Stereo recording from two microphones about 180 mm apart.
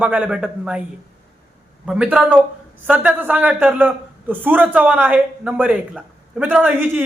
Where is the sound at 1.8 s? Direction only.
5° right (ahead or behind).